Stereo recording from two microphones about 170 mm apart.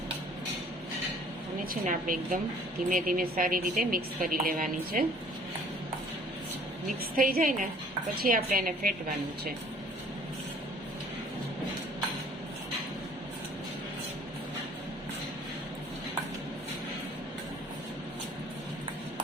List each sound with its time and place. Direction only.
1.7 s a woman's voice: 50° right (ahead or behind)
7.2 s speech: 55° right (ahead or behind)